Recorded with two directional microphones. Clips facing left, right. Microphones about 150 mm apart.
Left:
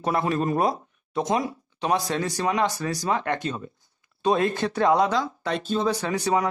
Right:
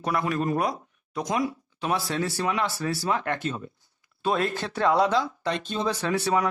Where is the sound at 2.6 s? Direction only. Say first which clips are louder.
Left 2 dB; 20° left (ahead or behind).